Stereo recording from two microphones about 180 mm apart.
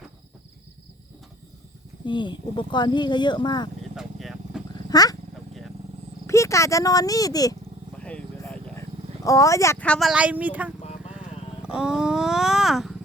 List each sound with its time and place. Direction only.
2.0 s speech: 25° left (ahead or behind)
3.9 s vehicle: centre (ahead or behind)
4.9 s roaring cats: 20° left (ahead or behind)
6.2 s speech: 15° left (ahead or behind)
7.9 s vehicle: 5° left (ahead or behind)
9.2 s speech: 20° left (ahead or behind); by 10.8 s 10° right (ahead or behind)
11.6 s a sound: 5° right (ahead or behind)